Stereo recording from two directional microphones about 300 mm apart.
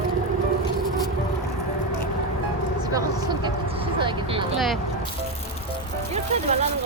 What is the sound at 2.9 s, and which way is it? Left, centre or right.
Speech, centre.